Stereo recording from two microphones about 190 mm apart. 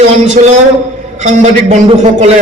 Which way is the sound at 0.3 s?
35° right (ahead or behind).